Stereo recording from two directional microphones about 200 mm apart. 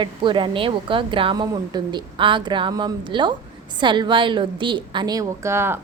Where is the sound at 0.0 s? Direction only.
25° right (ahead or behind).